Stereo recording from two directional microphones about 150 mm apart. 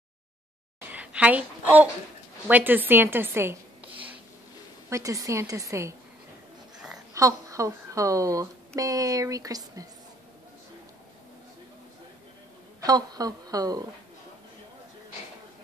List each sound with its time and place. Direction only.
0.7 s a sound: 10° right (ahead or behind)
2.4 s a woman's voice: 10° right (ahead or behind)
4.8 s speech: 20° right (ahead or behind)
7.2 s speech: 20° right (ahead or behind)
12.8 s speech: 25° right (ahead or behind)